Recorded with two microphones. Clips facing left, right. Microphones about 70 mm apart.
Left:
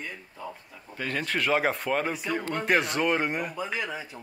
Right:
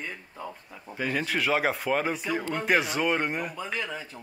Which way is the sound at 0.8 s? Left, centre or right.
Centre.